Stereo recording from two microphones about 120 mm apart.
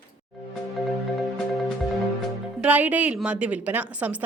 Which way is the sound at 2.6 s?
15° right (ahead or behind).